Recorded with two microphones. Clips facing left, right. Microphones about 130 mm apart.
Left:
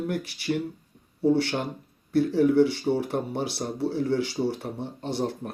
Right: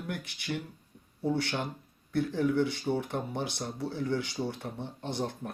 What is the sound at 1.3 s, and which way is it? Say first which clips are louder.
Speech: left 8 dB; 25° left (ahead or behind).